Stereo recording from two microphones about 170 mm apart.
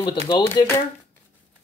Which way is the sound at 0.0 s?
30° left (ahead or behind).